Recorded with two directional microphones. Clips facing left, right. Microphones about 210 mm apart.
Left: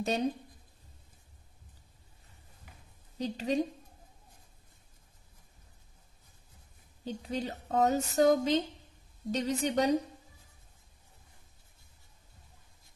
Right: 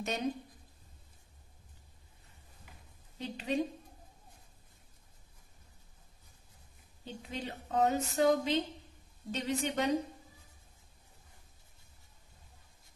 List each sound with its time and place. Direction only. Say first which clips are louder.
0.0 s a woman's voice: left 5 dB; 35° left (ahead or behind)
3.2 s a woman's voice: left 3 dB; 40° left (ahead or behind)
7.1 s a woman's voice: left 6 dB; 40° left (ahead or behind)